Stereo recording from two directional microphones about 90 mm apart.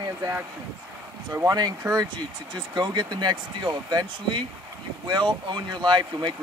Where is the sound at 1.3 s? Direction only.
35° right (ahead or behind).